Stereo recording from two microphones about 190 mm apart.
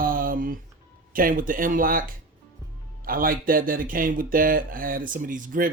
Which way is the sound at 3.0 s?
50° right (ahead or behind).